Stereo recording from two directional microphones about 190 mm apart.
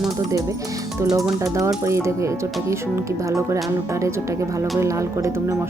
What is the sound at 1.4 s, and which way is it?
Speech, 15° right (ahead or behind).